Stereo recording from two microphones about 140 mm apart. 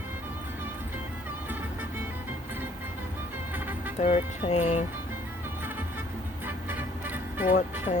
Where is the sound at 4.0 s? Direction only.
55° left (ahead or behind).